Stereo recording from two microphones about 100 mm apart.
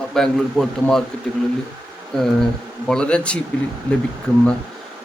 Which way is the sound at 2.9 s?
10° left (ahead or behind).